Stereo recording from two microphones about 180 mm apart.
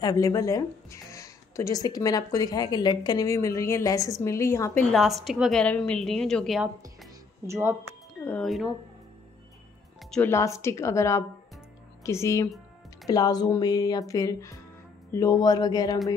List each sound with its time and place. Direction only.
0.0 s a woman's voice: 20° left (ahead or behind)
4.9 s a woman's voice: centre (ahead or behind)
7.4 s speech: 15° right (ahead or behind)
8.2 s a woman's voice: 5° left (ahead or behind)
10.1 s a woman's voice: 15° left (ahead or behind)